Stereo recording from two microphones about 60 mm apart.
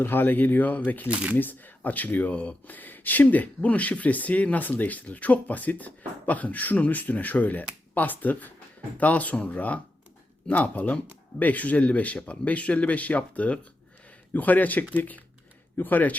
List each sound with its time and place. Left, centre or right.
0.0 s speech: left
1.0 s speech: right
1.4 s speech: left